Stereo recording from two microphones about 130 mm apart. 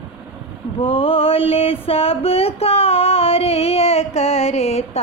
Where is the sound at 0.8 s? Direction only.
45° left (ahead or behind).